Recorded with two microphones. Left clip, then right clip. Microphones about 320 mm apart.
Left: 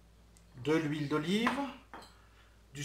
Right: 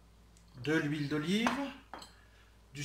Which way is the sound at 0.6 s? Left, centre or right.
Centre.